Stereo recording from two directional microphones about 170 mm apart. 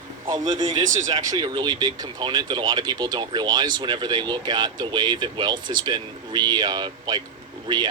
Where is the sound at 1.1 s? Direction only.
25° right (ahead or behind).